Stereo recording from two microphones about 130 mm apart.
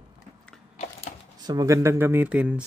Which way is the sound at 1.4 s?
30° right (ahead or behind).